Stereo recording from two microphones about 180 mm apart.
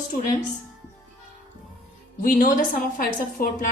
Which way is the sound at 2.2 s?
50° left (ahead or behind).